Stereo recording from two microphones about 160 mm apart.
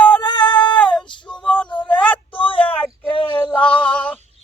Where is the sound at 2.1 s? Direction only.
30° left (ahead or behind).